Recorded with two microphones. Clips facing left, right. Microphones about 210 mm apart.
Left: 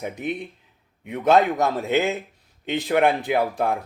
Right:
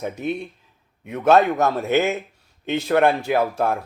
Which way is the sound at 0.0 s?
15° left (ahead or behind).